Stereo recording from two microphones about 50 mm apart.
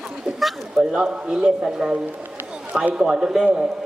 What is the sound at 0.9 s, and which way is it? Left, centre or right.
A man's voice, centre.